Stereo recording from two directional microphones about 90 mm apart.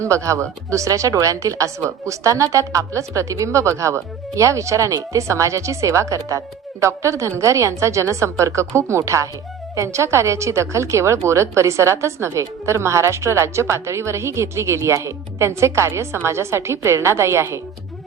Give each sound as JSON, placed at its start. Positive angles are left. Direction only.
{"t": 0.0, "sound": "a woman's voice", "side_deg": -35}